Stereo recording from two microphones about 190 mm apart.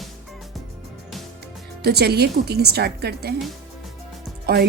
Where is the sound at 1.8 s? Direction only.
55° right (ahead or behind).